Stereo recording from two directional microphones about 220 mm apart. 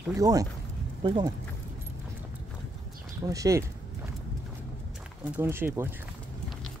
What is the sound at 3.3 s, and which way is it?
Speech, 15° right (ahead or behind).